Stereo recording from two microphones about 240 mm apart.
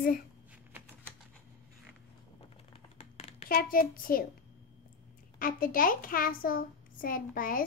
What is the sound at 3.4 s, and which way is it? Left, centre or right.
Speech, left.